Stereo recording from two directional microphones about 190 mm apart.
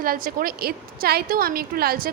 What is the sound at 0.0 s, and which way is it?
A woman's voice, 50° right (ahead or behind).